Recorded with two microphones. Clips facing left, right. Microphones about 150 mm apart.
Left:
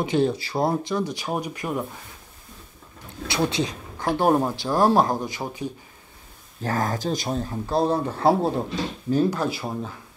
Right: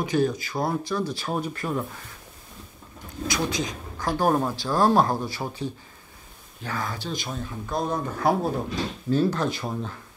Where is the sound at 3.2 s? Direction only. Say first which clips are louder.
Left 3 dB; 30° left (ahead or behind).